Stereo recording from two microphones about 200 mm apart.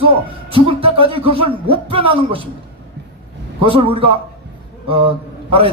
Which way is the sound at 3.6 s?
25° right (ahead or behind).